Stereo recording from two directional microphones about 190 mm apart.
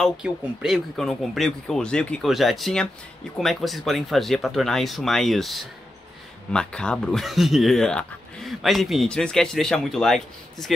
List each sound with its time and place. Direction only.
0.0 s speech: centre (ahead or behind)